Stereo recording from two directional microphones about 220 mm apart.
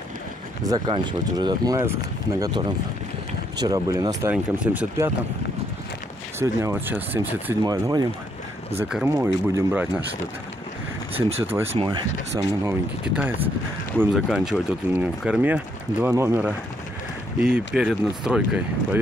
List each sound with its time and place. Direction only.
0.7 s speech: 20° right (ahead or behind)
6.4 s speech: 10° right (ahead or behind)
11.1 s speech: 25° right (ahead or behind)
12.6 s speech: 5° right (ahead or behind)